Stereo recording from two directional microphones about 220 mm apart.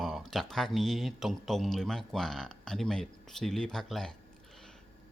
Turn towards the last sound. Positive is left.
turn(degrees=0)  # may be behind; listen again after turning